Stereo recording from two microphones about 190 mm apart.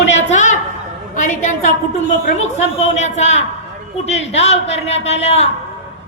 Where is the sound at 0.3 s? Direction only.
40° left (ahead or behind).